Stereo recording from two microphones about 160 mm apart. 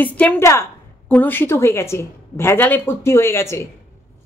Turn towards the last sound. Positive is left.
turn(degrees=15)  # may be behind; listen again after turning